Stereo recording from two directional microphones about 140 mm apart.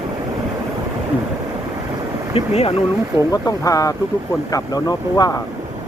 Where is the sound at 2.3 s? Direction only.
45° left (ahead or behind).